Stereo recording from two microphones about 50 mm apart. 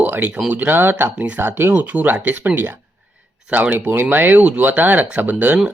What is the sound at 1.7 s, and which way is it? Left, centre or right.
Speech, right.